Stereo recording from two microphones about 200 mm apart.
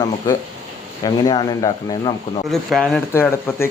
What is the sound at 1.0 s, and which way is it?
Speech, 20° left (ahead or behind).